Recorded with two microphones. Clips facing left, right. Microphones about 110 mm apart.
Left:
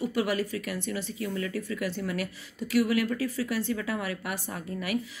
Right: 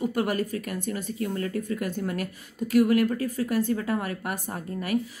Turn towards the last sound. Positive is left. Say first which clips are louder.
# right 3 dB
turn(degrees=-40)  # may be behind; listen again after turning